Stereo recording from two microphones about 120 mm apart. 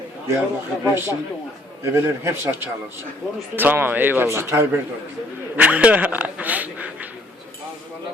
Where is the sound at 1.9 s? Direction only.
20° right (ahead or behind).